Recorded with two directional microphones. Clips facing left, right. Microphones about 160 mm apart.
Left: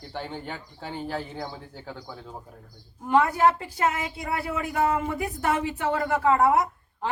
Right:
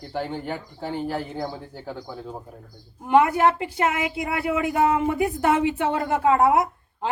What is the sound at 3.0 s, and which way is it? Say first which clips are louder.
A woman's voice: right 3 dB; 20° right (ahead or behind).